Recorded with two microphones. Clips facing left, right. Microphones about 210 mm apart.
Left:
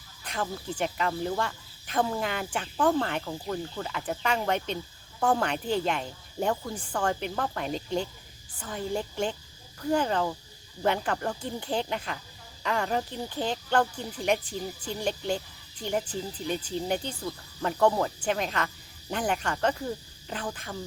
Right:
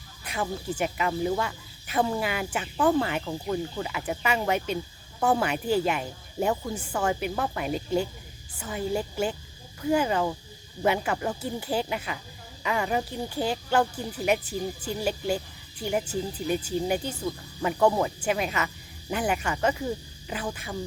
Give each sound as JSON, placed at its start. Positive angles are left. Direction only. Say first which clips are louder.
{"t": 0.3, "sound": "speech", "louder": "right 2 dB", "side_deg": -10}